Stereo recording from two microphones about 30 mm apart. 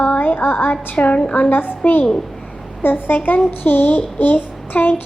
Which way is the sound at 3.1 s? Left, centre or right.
Left.